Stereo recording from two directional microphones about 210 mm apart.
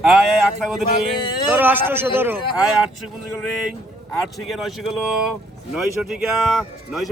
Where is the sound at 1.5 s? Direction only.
10° right (ahead or behind).